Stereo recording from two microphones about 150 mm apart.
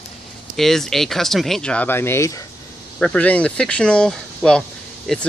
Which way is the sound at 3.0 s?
10° left (ahead or behind).